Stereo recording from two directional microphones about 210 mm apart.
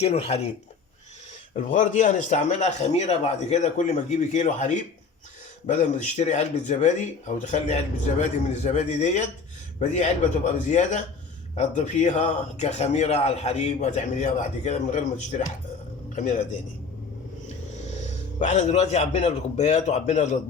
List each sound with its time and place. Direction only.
0.0 s speech: 30° left (ahead or behind)
1.5 s a man's voice: 35° left (ahead or behind)
18.3 s a man's voice: 35° left (ahead or behind)